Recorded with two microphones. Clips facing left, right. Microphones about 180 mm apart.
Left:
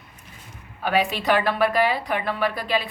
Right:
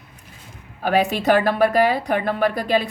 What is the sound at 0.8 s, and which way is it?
A woman's voice, 45° right (ahead or behind).